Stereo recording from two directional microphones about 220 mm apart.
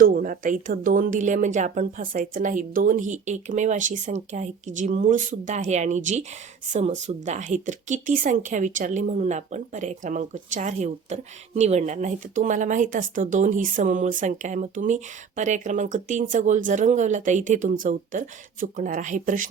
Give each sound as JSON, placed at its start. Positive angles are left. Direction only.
{"t": 0.0, "sound": "speech", "side_deg": -40}